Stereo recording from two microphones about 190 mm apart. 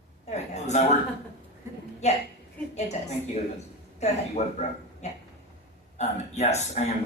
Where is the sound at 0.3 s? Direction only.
35° left (ahead or behind).